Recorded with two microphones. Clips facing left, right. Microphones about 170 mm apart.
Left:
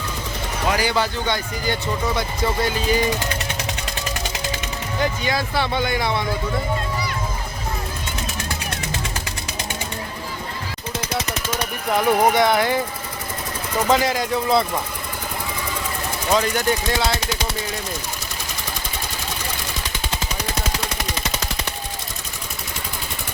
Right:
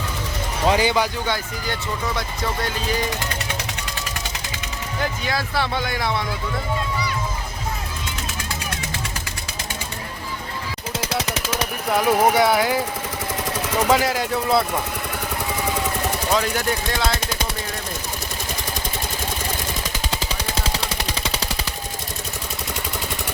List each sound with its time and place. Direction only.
0.7 s speech: 20° right (ahead or behind)
5.2 s speech: centre (ahead or behind)
11.9 s speech: 5° right (ahead or behind)
13.8 s speech: 5° right (ahead or behind)
16.3 s speech: centre (ahead or behind)
20.6 s machine gun: 30° right (ahead or behind)